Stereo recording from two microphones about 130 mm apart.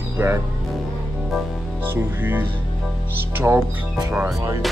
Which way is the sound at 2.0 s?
15° right (ahead or behind).